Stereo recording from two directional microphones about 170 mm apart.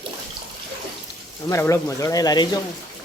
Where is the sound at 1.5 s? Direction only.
15° left (ahead or behind).